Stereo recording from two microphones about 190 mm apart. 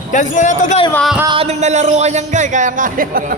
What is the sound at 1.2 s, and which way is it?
Speech, 25° right (ahead or behind).